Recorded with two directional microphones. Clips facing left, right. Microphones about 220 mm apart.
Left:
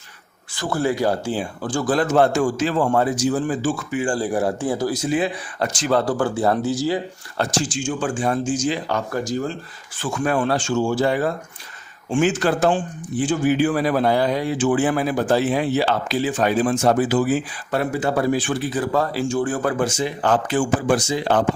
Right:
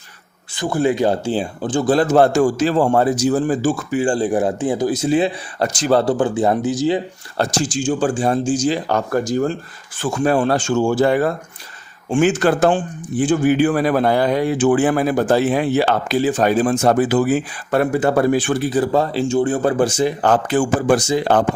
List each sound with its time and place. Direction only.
0.5 s speech: 20° right (ahead or behind); by 4.0 s 40° right (ahead or behind)
4.0 s speech: 20° right (ahead or behind)
6.1 s speech: 20° right (ahead or behind)
7.3 s speech: 35° right (ahead or behind)
9.1 s speech: 50° right (ahead or behind)
10.0 s speech: 35° right (ahead or behind)
10.5 s speech: 50° right (ahead or behind)
16.3 s speech: 40° right (ahead or behind)
18.7 s speech: 30° right (ahead or behind); by 21.4 s 45° right (ahead or behind)